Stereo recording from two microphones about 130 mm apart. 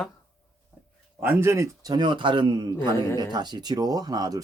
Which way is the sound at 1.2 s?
15° right (ahead or behind).